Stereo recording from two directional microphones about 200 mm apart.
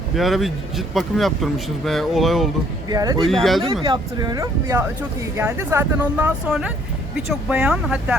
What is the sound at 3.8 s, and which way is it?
Speech, 20° right (ahead or behind).